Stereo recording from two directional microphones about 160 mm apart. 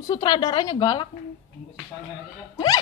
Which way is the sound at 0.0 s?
30° left (ahead or behind).